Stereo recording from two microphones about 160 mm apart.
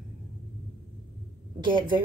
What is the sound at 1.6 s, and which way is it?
Speech, 30° right (ahead or behind).